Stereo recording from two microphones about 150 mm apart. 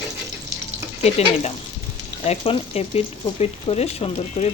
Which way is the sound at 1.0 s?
45° left (ahead or behind).